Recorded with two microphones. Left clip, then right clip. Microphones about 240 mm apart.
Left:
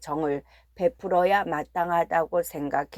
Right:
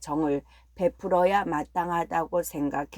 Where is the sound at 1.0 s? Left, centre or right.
Left.